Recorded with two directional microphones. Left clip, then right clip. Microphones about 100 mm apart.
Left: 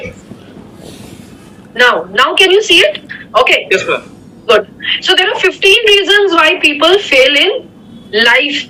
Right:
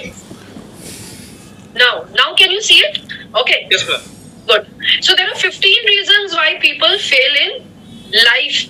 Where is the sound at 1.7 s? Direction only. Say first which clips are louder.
Left 3 dB; 20° right (ahead or behind).